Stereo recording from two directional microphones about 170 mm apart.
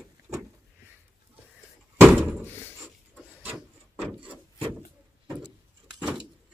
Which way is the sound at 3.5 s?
Centre (ahead or behind).